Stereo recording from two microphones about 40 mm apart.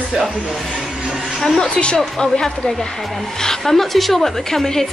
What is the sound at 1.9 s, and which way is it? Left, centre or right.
A woman's voice, centre.